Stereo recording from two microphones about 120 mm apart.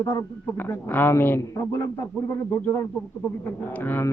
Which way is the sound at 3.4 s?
15° left (ahead or behind).